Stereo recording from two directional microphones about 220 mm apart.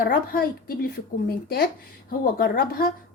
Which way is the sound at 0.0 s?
40° left (ahead or behind).